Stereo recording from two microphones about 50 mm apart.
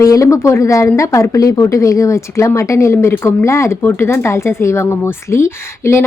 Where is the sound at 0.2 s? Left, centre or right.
Left.